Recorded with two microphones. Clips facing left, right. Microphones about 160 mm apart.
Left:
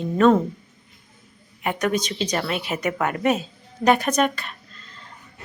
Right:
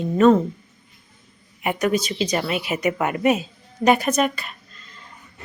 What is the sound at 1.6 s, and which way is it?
Speech, 5° right (ahead or behind).